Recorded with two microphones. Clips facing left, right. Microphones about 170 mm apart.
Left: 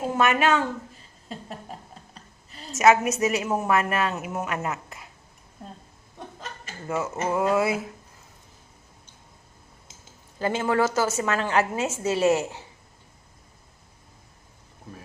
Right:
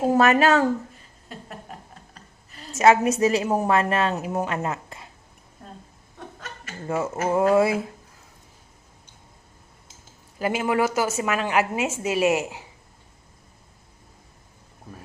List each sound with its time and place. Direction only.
0.1 s a woman's voice: 40° right (ahead or behind)
2.7 s a woman's voice: 30° right (ahead or behind)
6.8 s speech: 30° right (ahead or behind)
10.3 s a woman's voice: 10° right (ahead or behind)